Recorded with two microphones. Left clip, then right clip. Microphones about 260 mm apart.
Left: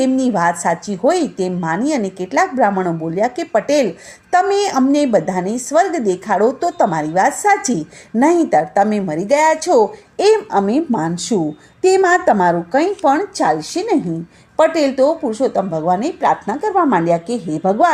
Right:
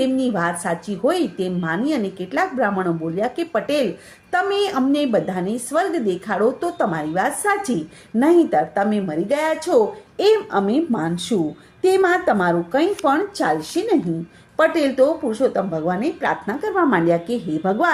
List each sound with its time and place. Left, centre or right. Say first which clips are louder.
0.0 s a woman's voice: left 5 dB; left